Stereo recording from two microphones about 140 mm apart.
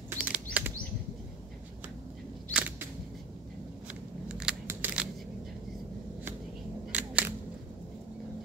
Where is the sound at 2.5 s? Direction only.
10° right (ahead or behind).